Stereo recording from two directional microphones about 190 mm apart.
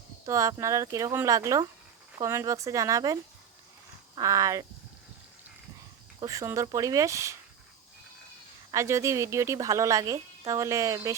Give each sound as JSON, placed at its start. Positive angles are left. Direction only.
{"t": 0.3, "sound": "speech", "side_deg": -15}
{"t": 6.1, "sound": "speech", "side_deg": -15}
{"t": 8.7, "sound": "speech", "side_deg": -15}